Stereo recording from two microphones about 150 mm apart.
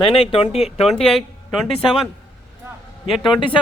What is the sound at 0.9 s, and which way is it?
Speech, 5° left (ahead or behind).